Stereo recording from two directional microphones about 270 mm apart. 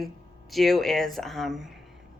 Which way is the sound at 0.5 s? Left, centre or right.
Centre.